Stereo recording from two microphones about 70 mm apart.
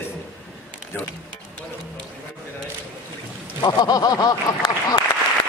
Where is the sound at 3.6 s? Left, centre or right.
Left.